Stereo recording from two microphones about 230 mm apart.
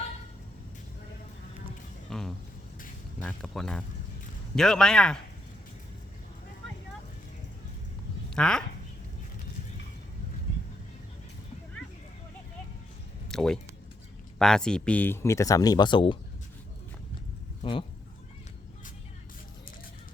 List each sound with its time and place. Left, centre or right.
2.0 s a sound: centre
3.2 s a man's voice: centre
8.3 s speech: centre
13.2 s music: centre
14.3 s speech: centre; by 16.1 s left
17.6 s speech: left